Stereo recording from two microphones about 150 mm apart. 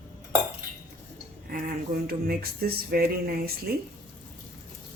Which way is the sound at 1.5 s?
85° right.